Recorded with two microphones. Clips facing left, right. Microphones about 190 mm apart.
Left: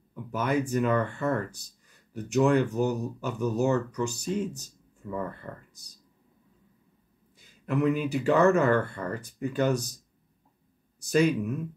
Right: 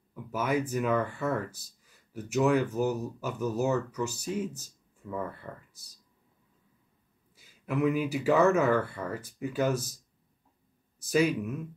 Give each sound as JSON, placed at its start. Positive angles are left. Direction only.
{"t": 0.1, "sound": "speech", "side_deg": -5}
{"t": 7.3, "sound": "speech", "side_deg": -5}
{"t": 11.0, "sound": "speech", "side_deg": -5}